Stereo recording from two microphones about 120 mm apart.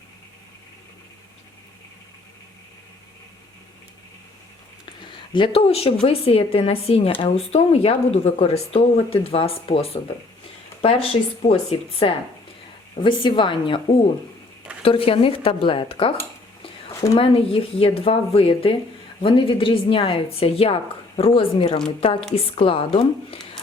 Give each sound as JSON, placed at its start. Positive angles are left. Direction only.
{"t": 5.3, "sound": "speech", "side_deg": 50}
{"t": 13.0, "sound": "a woman's voice", "side_deg": 40}
{"t": 14.8, "sound": "speech", "side_deg": 50}
{"t": 17.2, "sound": "speech", "side_deg": 50}